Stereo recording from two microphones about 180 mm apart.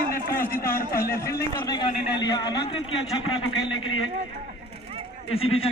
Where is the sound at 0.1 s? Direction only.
55° left (ahead or behind).